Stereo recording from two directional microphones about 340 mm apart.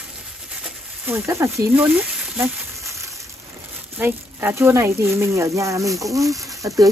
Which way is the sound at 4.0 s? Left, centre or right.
Centre.